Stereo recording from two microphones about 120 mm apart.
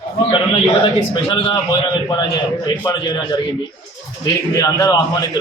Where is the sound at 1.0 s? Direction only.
45° left (ahead or behind).